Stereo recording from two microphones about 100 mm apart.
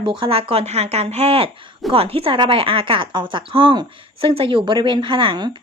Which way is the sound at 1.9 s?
70° right (ahead or behind).